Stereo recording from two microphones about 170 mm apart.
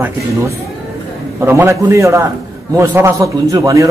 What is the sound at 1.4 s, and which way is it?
A man's voice, 15° right (ahead or behind).